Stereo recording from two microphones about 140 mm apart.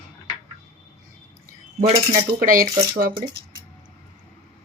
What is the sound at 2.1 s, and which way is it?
Speech, 80° right.